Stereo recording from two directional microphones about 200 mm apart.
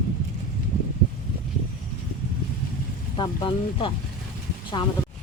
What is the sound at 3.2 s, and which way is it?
Speech, 25° left (ahead or behind).